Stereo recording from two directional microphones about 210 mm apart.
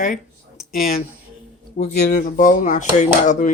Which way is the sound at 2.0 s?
45° left (ahead or behind).